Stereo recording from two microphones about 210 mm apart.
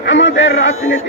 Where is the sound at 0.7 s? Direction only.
75° left (ahead or behind).